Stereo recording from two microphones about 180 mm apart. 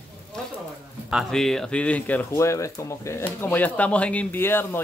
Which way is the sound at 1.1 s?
Centre (ahead or behind).